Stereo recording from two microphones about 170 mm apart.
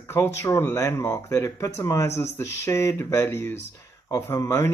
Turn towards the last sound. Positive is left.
turn(degrees=15)  # may be behind; listen again after turning